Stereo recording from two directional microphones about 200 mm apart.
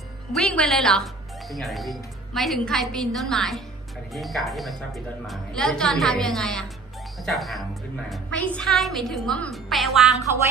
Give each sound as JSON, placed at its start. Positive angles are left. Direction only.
{"t": 0.3, "sound": "a woman's voice", "side_deg": 5}